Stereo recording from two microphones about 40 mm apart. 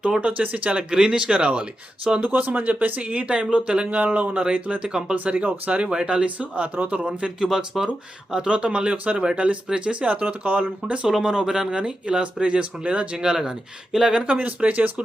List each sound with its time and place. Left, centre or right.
0.2 s speech: right
2.2 s speech: right
3.1 s speech: right
3.9 s speech: right
4.8 s speech: centre
5.1 s speech: right
5.9 s speech: right
7.2 s speech: centre
10.1 s speech: right
11.2 s speech: centre
13.2 s speech: centre
14.1 s speech: right